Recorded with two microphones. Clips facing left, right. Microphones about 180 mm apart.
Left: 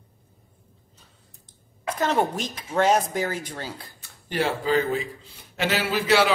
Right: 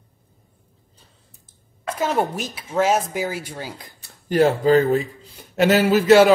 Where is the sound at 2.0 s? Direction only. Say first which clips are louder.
Right 1 dB; 10° right (ahead or behind).